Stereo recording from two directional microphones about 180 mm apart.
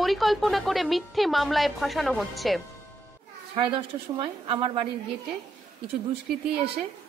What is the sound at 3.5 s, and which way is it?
A woman's voice, 30° right (ahead or behind).